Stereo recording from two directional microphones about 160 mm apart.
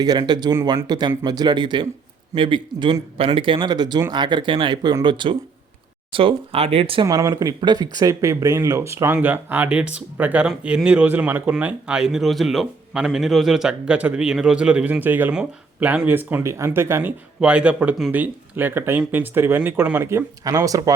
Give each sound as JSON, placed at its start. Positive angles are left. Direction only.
{"t": 0.0, "sound": "speech", "side_deg": -25}
{"t": 7.0, "sound": "speech", "side_deg": -20}